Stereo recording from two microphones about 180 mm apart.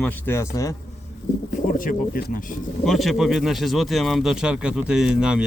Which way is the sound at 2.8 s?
Centre (ahead or behind).